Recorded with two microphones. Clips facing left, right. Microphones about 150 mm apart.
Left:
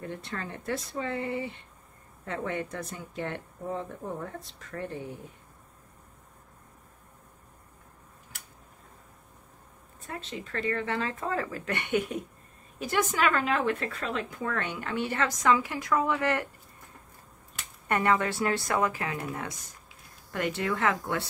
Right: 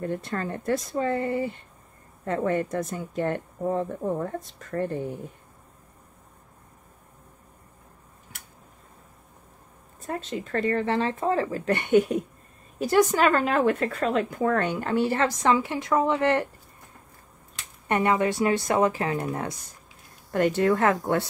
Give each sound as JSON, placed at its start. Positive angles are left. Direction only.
{"t": 0.0, "sound": "speech", "side_deg": -45}
{"t": 10.0, "sound": "speech", "side_deg": -40}
{"t": 17.8, "sound": "speech", "side_deg": -20}